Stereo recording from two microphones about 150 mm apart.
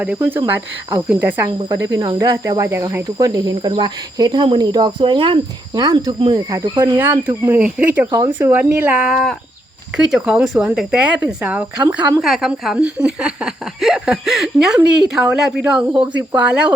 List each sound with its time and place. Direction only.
0.0 s speech: 10° right (ahead or behind); by 6.6 s 30° right (ahead or behind)
6.8 s speech: 15° right (ahead or behind)